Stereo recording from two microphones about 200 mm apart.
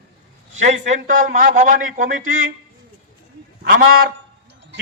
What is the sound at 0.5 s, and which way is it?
A man's voice, 35° right (ahead or behind).